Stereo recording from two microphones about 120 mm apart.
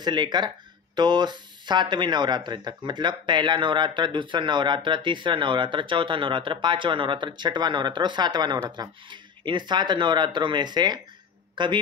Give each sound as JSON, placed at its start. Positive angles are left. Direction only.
{"t": 0.0, "sound": "a man's voice", "side_deg": -40}